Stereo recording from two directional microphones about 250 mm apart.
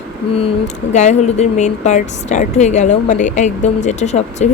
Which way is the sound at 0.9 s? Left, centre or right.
Left.